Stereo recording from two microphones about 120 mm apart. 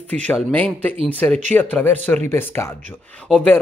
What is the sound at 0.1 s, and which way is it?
Speech, 15° left (ahead or behind).